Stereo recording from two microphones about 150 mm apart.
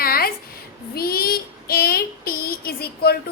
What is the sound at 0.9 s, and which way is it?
Child singing, 85° left.